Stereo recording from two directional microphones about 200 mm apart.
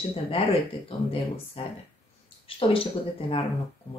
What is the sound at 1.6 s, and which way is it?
Speech, 25° left (ahead or behind).